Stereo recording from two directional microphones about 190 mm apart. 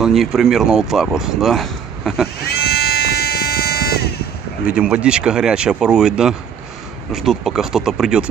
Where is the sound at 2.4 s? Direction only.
55° left (ahead or behind).